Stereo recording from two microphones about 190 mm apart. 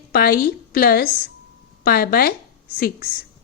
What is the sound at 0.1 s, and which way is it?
A woman's voice, 50° left (ahead or behind).